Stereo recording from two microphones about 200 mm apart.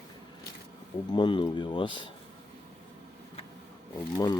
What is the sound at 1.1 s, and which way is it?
Speech, 25° left (ahead or behind).